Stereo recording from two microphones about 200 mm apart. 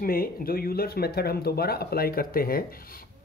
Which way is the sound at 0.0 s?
45° left (ahead or behind).